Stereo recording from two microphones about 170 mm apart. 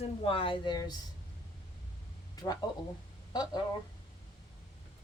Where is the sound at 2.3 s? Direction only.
20° left (ahead or behind).